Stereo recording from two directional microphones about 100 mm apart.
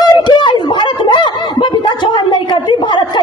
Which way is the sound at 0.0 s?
50° left (ahead or behind).